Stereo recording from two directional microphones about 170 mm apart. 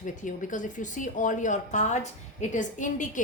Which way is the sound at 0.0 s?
50° left (ahead or behind).